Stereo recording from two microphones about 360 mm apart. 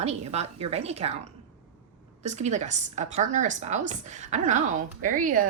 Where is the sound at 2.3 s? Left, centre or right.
Centre.